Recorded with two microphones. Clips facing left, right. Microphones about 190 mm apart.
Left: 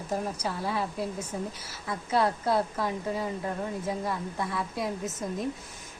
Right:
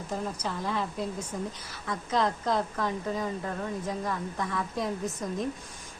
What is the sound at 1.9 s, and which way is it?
Speech, 10° left (ahead or behind).